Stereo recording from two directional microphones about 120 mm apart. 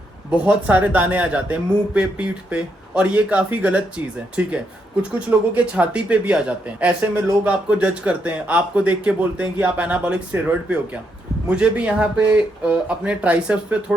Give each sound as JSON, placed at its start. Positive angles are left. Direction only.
{"t": 0.3, "sound": "a man's voice", "side_deg": -10}
{"t": 5.5, "sound": "a man's voice", "side_deg": -10}